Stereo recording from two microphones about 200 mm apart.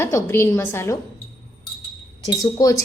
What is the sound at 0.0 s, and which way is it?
Speech, 15° left (ahead or behind).